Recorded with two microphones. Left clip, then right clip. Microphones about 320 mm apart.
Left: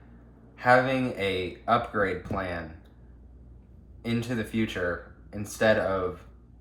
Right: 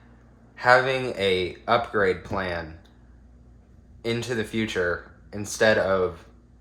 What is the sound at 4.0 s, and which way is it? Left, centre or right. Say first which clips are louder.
Speech: right 4 dB; right.